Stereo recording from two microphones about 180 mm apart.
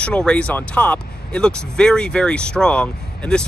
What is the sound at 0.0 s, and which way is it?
Speech, 5° left (ahead or behind).